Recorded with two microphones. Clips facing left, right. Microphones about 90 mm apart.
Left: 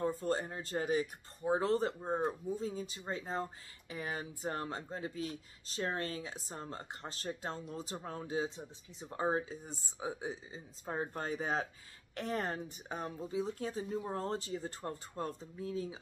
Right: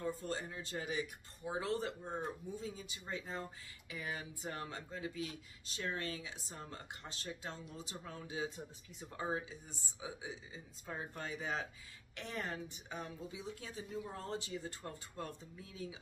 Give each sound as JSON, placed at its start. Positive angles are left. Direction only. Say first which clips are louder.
{"t": 0.0, "sound": "speech", "louder": "left 6 dB", "side_deg": 40}